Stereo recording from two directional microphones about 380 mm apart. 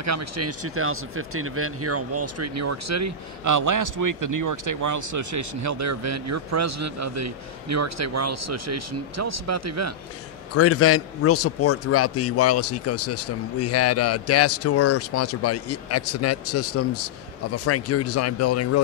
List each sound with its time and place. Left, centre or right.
0.0 s speech: right
10.5 s a man's voice: left